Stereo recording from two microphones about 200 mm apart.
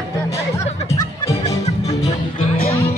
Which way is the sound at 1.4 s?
35° left (ahead or behind).